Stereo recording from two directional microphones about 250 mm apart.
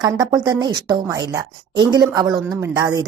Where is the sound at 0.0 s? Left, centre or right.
Centre.